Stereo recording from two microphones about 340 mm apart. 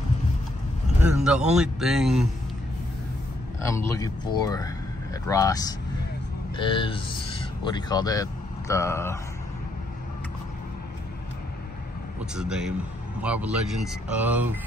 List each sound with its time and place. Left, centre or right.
1.0 s speech: centre
3.6 s speech: centre
12.4 s speech: centre